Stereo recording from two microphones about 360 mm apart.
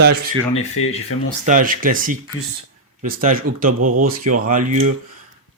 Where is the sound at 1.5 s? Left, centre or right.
Right.